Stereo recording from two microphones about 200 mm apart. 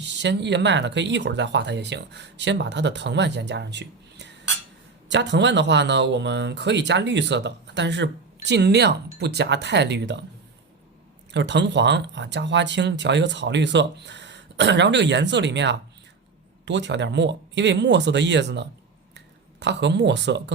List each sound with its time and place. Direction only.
0.0 s speech: 60° right (ahead or behind)
11.3 s speech: 60° right (ahead or behind)